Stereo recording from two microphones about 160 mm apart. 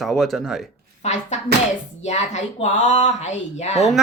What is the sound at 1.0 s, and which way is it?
Speech, 45° left (ahead or behind).